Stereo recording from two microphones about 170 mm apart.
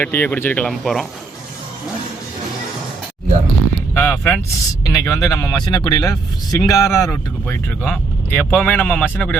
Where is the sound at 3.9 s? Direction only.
10° left (ahead or behind).